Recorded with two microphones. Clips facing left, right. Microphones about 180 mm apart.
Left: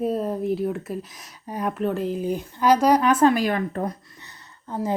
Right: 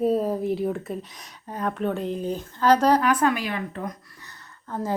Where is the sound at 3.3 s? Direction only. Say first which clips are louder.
Left 6 dB; 45° left (ahead or behind).